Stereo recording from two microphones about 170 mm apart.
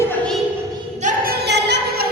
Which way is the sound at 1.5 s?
80° right.